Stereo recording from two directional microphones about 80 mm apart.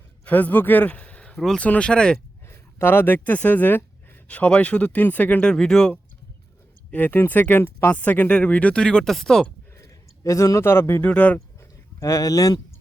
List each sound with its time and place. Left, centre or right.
0.3 s a man's voice: left
2.5 s speech: left; by 6.0 s centre
6.9 s speech: left; by 9.5 s centre
10.2 s speech: left
11.0 s speech: centre
11.9 s speech: left